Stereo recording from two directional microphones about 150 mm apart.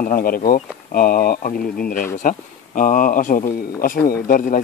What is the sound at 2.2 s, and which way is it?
Speech, 60° left (ahead or behind).